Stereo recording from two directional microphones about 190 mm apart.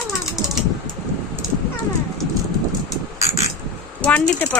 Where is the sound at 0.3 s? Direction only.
Centre (ahead or behind).